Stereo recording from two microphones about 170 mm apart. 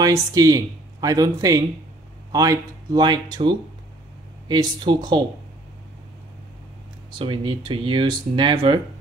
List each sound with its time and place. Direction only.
0.0 s speech: 20° right (ahead or behind)
7.2 s speech: 30° right (ahead or behind)